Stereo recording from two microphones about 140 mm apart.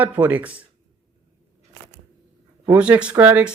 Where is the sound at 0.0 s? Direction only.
10° right (ahead or behind).